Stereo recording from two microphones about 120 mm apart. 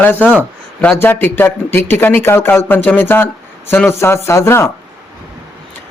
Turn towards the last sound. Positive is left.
turn(degrees=20)  # may be behind; listen again after turning